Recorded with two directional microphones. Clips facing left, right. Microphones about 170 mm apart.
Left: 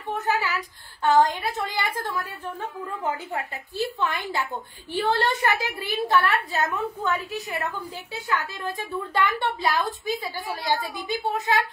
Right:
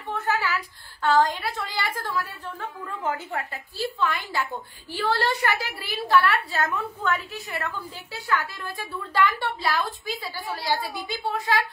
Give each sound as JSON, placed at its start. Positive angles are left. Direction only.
{"t": 0.1, "sound": "a woman's voice", "side_deg": 20}